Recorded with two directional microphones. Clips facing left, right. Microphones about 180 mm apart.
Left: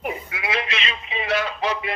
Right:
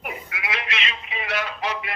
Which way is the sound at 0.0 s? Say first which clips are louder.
Left 5 dB; 30° left (ahead or behind).